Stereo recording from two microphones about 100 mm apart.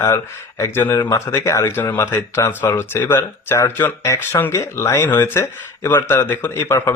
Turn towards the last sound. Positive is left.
turn(degrees=25)  # may be behind; listen again after turning